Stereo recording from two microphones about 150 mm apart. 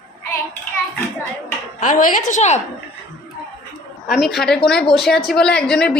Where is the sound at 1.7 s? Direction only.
60° left (ahead or behind).